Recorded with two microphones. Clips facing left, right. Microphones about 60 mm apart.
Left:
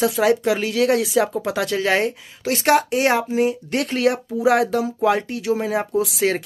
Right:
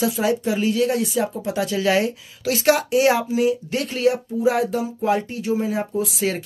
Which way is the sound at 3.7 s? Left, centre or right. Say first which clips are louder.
Left 1 dB; left.